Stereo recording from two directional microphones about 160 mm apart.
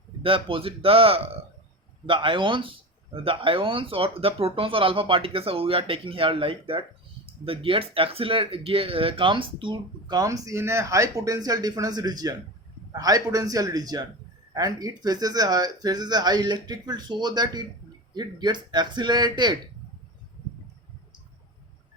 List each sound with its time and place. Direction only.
0.2 s speech: 35° right (ahead or behind)